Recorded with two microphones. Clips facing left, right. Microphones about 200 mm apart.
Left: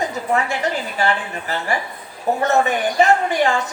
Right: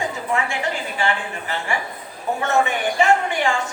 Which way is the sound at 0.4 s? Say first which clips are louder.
Left 3 dB; 40° left (ahead or behind).